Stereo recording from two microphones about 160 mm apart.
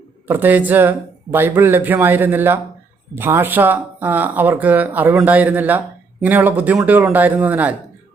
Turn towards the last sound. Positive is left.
turn(degrees=-10)  # may be behind; listen again after turning